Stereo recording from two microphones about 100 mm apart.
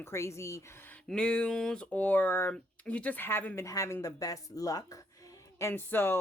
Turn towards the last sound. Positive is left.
turn(degrees=20)  # may be behind; listen again after turning